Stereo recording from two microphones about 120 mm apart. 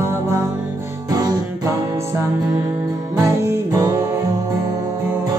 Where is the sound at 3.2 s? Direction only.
25° right (ahead or behind).